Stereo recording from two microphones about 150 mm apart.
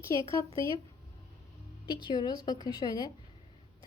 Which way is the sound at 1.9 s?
30° left (ahead or behind).